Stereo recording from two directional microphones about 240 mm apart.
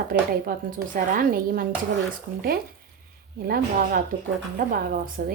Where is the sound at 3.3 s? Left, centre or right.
Right.